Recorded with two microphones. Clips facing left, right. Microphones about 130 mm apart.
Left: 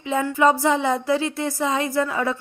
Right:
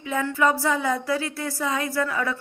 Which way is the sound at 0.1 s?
20° left (ahead or behind).